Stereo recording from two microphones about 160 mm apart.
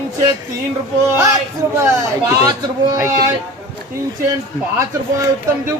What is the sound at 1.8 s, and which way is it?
A man's voice, 20° right (ahead or behind).